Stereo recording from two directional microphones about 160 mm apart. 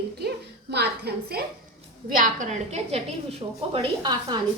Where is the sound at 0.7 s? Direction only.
90° right.